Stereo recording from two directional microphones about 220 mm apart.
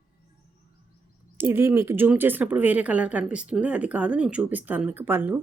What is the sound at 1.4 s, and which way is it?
Speech, 10° right (ahead or behind).